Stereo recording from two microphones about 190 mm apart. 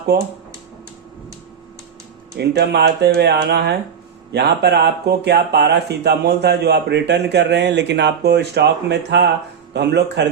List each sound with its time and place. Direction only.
2.4 s speech: 60° right (ahead or behind)